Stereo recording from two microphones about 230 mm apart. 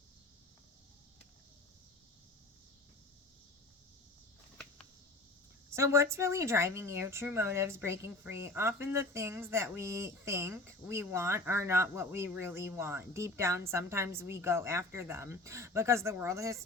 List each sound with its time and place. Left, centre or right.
5.7 s a woman's voice: centre